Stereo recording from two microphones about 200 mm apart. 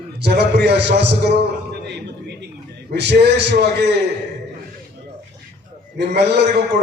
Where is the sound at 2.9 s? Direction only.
60° right (ahead or behind).